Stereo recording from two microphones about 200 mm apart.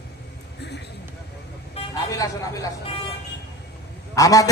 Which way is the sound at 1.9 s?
15° left (ahead or behind).